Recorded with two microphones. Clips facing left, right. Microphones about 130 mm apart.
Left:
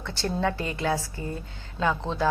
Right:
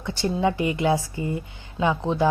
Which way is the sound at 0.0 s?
15° right (ahead or behind).